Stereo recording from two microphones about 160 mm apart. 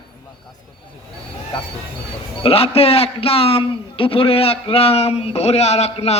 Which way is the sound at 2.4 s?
40° left (ahead or behind).